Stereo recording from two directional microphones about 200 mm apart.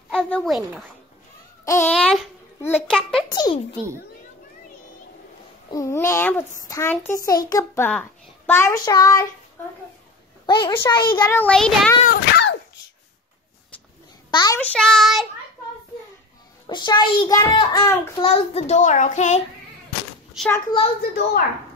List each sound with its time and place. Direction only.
0.1 s speech: 5° left (ahead or behind)
1.9 s a child's voice: 5° left (ahead or behind)
3.3 s a child's voice: 20° left (ahead or behind)
5.7 s a child's voice: 15° left (ahead or behind)
10.4 s a woman's voice: 25° left (ahead or behind)
11.2 s a child's voice: 10° left (ahead or behind)
12.1 s a sound: 60° left (ahead or behind)
14.3 s a child's voice: 20° left (ahead or behind)
14.6 s a child's voice: 5° left (ahead or behind)
16.6 s a child's voice: 20° left (ahead or behind)
18.2 s a child's voice: 30° left (ahead or behind)
20.5 s a child's voice: 25° left (ahead or behind)